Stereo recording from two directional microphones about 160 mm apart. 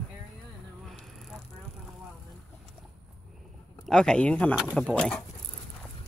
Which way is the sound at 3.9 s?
5° left (ahead or behind).